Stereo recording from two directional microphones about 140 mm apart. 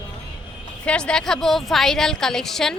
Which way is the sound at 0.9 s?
5° left (ahead or behind).